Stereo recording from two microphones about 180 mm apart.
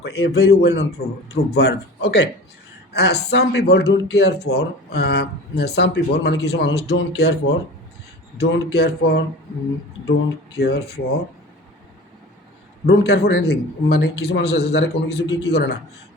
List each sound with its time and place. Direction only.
0.0 s a man's voice: 65° left (ahead or behind)
10.5 s a man's voice: 65° left (ahead or behind)
12.8 s speech: 70° left (ahead or behind)